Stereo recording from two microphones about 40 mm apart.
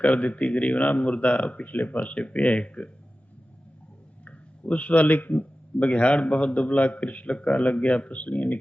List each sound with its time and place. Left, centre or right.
0.0 s speech: left
2.0 s speech: left
4.3 s speech: left